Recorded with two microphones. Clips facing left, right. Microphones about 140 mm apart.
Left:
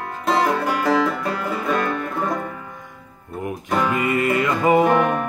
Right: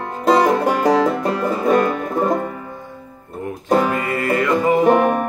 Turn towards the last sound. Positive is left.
turn(degrees=-45)  # may be behind; listen again after turning